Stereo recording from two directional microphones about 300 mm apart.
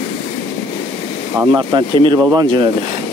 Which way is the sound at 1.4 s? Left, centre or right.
Centre.